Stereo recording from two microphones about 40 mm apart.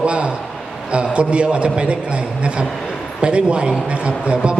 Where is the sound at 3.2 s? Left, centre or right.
Right.